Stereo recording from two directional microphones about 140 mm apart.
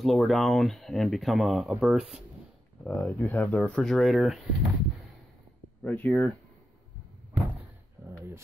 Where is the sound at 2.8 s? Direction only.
10° left (ahead or behind).